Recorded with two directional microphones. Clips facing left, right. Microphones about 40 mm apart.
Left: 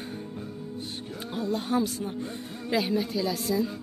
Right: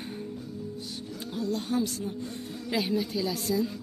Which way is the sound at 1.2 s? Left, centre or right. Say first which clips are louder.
Left 1 dB; left.